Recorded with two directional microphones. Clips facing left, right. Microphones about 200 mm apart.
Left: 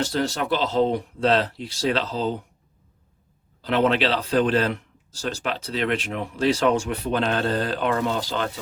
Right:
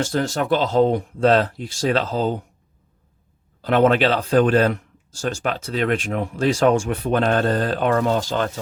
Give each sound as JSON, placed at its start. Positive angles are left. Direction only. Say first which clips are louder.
{"t": 0.0, "sound": "speech", "louder": "right 2 dB", "side_deg": -50}
{"t": 3.6, "sound": "speech", "louder": "right 4 dB", "side_deg": -50}